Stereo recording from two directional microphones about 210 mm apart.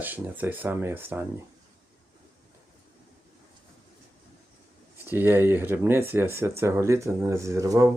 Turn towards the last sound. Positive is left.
turn(degrees=-15)  # may be behind; listen again after turning